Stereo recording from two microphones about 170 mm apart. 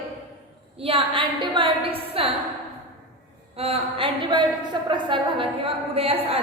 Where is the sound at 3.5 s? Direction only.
35° right (ahead or behind).